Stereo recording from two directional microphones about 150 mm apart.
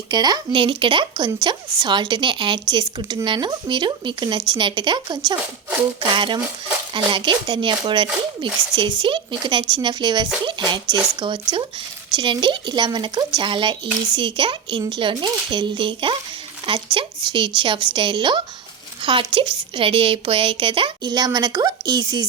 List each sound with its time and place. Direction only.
0.1 s a woman's voice: 25° right (ahead or behind)